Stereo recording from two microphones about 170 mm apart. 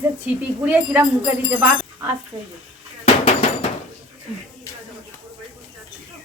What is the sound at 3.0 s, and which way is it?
Hammer, 45° left (ahead or behind).